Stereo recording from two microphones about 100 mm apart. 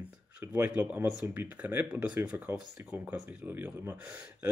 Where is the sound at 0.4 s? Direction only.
15° right (ahead or behind).